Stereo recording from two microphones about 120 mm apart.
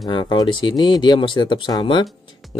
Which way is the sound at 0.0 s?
40° left (ahead or behind).